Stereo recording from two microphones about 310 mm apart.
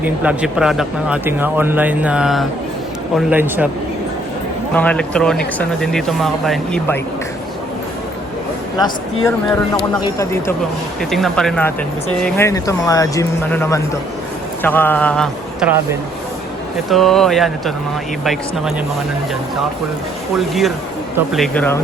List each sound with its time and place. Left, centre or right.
0.0 s speech: centre
4.7 s speech: centre
9.2 s speech: centre
20.3 s speech: centre